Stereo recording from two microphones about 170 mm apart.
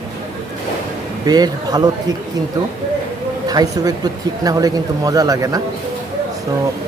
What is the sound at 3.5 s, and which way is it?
A woman's voice, 25° right (ahead or behind).